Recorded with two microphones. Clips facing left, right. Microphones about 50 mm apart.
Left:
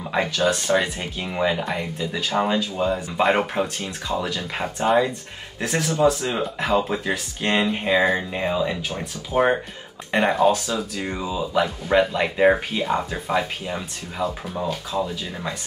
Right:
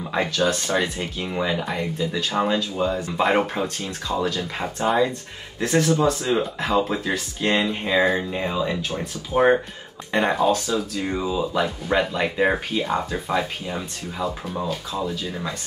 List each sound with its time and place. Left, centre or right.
0.4 s speech: centre
1.6 s speech: centre
3.6 s speech: left
4.1 s speech: centre